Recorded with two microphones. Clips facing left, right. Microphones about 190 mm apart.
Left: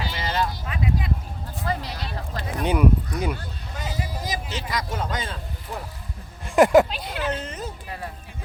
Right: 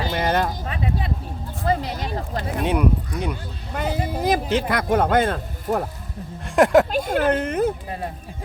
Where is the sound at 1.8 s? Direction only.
45° right (ahead or behind).